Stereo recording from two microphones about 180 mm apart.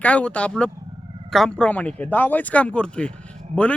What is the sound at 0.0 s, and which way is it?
A man's voice, 5° left (ahead or behind).